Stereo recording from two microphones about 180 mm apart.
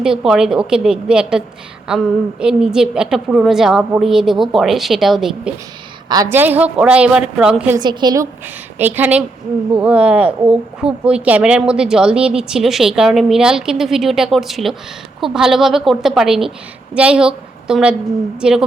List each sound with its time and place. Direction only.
0.0 s a woman's voice: 5° right (ahead or behind)
7.8 s a woman's voice: 25° right (ahead or behind)
8.8 s a woman's voice: 10° right (ahead or behind)